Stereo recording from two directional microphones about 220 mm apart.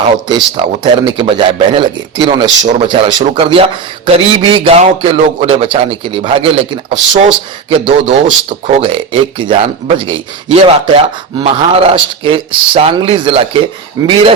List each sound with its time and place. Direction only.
0.3 s a man's voice: 20° right (ahead or behind)
7.9 s a man's voice: 25° right (ahead or behind)